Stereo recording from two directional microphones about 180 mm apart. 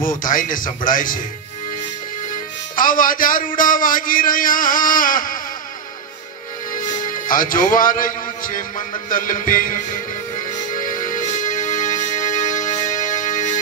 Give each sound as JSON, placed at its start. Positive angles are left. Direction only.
{"t": 0.0, "sound": "a man's voice", "side_deg": 50}
{"t": 2.7, "sound": "a man's voice", "side_deg": 50}
{"t": 6.7, "sound": "a man's voice", "side_deg": 50}
{"t": 10.7, "sound": "music", "side_deg": 50}